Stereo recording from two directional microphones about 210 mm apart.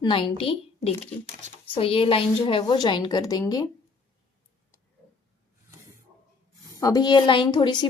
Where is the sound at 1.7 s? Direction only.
25° left (ahead or behind).